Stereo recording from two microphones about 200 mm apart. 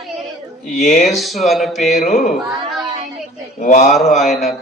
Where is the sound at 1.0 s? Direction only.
Centre (ahead or behind).